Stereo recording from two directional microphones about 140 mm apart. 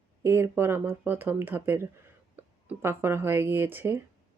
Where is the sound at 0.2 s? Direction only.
20° right (ahead or behind).